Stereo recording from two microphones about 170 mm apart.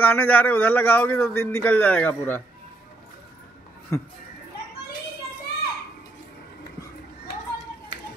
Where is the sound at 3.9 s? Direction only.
15° left (ahead or behind).